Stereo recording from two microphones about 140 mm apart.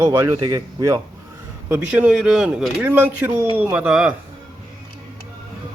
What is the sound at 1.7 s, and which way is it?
Speech, 10° right (ahead or behind).